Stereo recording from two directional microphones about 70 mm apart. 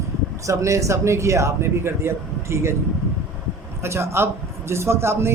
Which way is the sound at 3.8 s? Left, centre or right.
Right.